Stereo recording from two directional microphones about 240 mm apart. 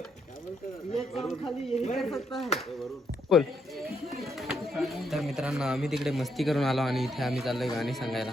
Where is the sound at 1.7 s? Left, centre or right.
Left.